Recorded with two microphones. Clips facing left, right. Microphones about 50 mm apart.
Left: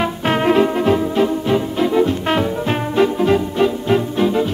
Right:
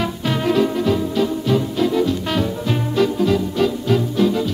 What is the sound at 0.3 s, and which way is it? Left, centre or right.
Music, left.